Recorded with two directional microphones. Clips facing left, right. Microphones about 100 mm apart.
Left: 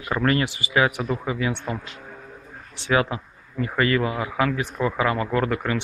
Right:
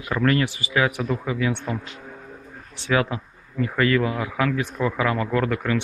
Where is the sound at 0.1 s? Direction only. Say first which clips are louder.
Right 1 dB; 15° left (ahead or behind).